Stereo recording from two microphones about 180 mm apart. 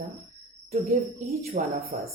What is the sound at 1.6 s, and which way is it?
Speech, 40° right (ahead or behind).